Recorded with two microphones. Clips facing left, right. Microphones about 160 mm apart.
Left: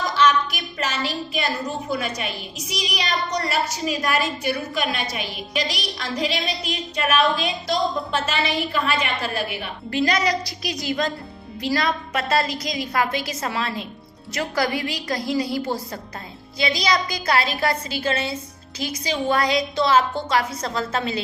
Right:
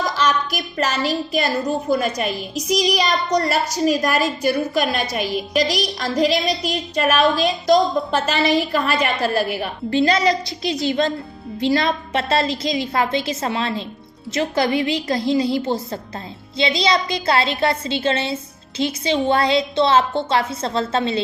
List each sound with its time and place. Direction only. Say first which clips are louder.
0.2 s a woman's voice: left 5 dB; 40° right (ahead or behind)
10.0 s a woman's voice: right 4 dB; 30° right (ahead or behind)